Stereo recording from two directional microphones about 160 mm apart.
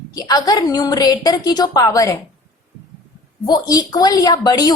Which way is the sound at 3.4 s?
25° left (ahead or behind).